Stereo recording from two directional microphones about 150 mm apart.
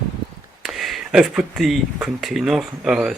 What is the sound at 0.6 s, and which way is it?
Speech, centre (ahead or behind).